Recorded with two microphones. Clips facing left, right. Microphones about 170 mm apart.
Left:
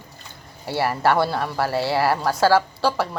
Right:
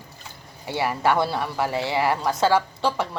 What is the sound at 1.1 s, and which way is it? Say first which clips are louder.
A woman's voice: left 2 dB; centre (ahead or behind).